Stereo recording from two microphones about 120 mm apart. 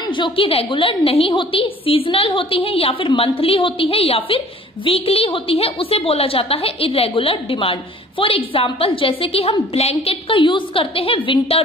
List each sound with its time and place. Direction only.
0.0 s a woman's voice: 40° left (ahead or behind)